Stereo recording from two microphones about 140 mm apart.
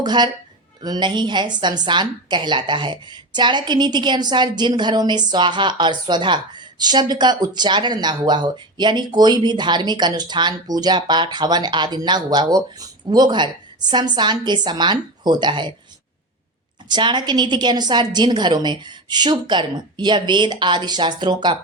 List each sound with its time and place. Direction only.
0.0 s a woman's voice: 30° right (ahead or behind)
16.9 s a woman's voice: 30° right (ahead or behind)